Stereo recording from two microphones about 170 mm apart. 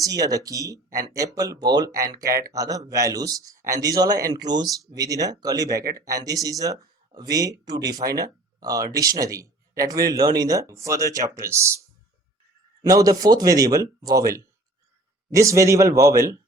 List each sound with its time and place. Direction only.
0.0 s speech: 20° right (ahead or behind)
12.8 s speech: 20° right (ahead or behind)